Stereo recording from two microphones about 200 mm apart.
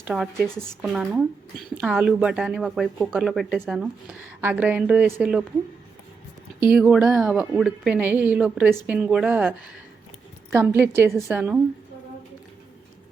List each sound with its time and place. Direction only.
0.0 s speech: 10° right (ahead or behind)
6.7 s speech: 5° right (ahead or behind)